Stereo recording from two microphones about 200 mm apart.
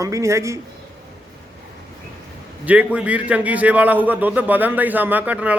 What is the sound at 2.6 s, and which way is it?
A man's voice, 5° right (ahead or behind).